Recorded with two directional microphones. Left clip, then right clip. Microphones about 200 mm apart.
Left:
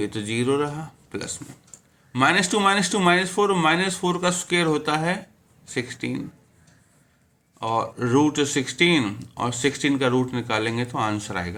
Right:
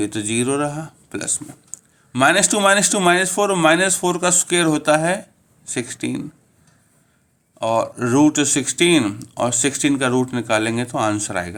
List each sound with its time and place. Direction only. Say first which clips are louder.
0.0 s speech: right 4 dB; 45° right (ahead or behind)
7.6 s speech: right 5 dB; 45° right (ahead or behind)